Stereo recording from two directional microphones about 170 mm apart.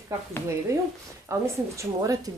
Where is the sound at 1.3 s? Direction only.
20° right (ahead or behind).